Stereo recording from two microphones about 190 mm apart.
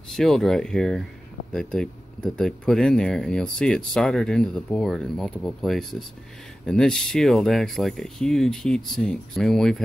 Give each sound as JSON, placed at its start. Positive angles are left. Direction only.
{"t": 0.1, "sound": "speech", "side_deg": 0}